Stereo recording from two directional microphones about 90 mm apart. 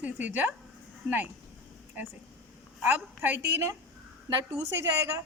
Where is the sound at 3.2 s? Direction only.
20° right (ahead or behind).